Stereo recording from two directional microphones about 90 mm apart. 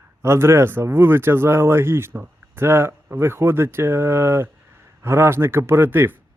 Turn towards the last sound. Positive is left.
turn(degrees=-25)  # may be behind; listen again after turning